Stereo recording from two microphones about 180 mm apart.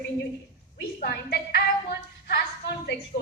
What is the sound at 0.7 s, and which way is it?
Music, 65° left (ahead or behind).